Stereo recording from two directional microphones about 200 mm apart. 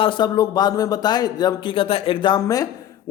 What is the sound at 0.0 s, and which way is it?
A man's voice, 25° left (ahead or behind).